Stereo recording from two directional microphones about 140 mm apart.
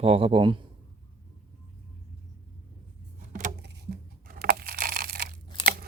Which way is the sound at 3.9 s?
90° right.